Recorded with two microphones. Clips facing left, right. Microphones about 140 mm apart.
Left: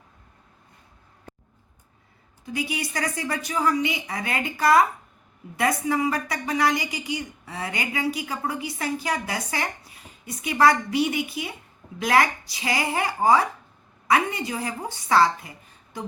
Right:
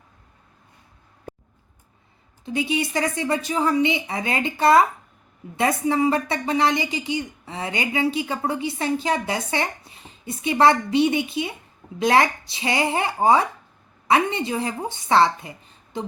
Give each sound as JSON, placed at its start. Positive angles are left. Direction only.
{"t": 2.4, "sound": "a woman's voice", "side_deg": -25}